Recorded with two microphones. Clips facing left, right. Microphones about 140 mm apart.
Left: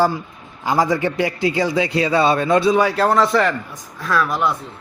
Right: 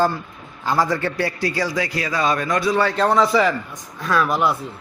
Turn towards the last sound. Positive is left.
turn(degrees=0)  # may be behind; listen again after turning